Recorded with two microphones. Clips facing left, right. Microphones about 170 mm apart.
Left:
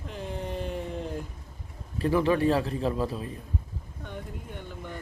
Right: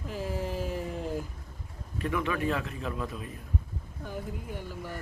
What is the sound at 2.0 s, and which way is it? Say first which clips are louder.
A man's voice: left 7 dB; 30° left (ahead or behind).